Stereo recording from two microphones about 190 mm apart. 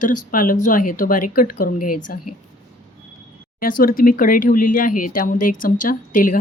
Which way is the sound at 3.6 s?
50° left (ahead or behind).